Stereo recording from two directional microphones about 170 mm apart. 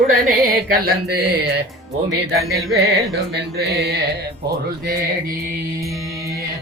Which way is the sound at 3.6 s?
70° right (ahead or behind).